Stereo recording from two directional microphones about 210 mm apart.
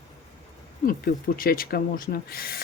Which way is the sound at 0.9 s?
45° left (ahead or behind).